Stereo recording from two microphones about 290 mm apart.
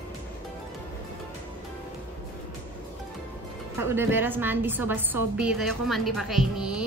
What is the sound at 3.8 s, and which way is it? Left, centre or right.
A woman's voice, centre.